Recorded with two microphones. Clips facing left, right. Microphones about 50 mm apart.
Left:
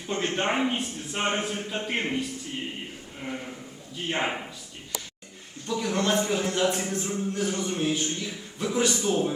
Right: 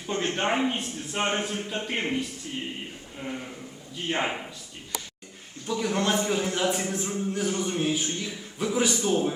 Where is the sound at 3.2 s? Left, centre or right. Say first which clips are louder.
Even; left.